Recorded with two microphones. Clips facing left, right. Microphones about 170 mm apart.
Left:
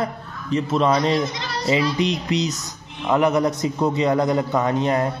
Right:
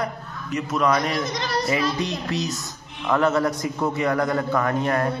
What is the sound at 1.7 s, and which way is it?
A man's voice, 20° left (ahead or behind).